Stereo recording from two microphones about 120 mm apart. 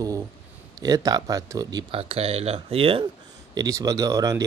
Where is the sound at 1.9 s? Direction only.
55° right (ahead or behind).